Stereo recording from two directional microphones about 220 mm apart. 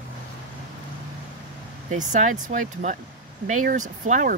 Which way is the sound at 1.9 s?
35° right (ahead or behind).